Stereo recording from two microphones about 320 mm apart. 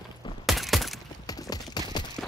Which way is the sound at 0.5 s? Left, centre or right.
Centre.